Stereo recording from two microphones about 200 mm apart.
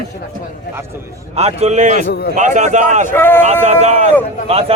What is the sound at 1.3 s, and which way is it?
Speech, 30° right (ahead or behind).